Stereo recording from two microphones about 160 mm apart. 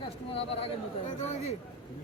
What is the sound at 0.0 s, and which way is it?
Speech, 35° left (ahead or behind).